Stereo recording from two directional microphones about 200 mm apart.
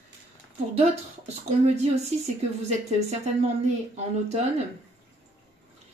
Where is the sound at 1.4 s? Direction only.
35° right (ahead or behind).